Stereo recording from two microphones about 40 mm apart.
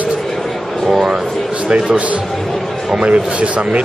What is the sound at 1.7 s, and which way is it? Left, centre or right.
Speech, right.